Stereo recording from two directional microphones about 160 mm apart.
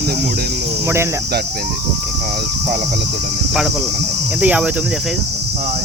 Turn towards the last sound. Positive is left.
turn(degrees=-10)  # may be behind; listen again after turning